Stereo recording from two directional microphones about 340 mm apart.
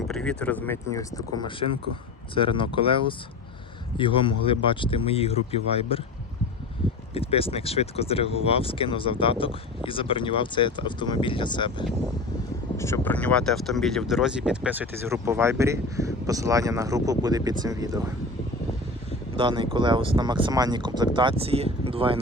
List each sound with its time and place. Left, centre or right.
0.1 s speech: centre
7.1 s speech: centre
19.4 s speech: centre